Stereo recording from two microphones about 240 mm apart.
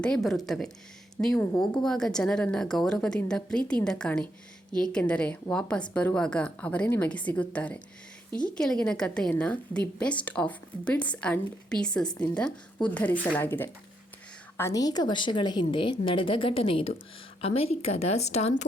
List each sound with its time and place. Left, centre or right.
0.0 s a woman's voice: centre; by 18.5 s left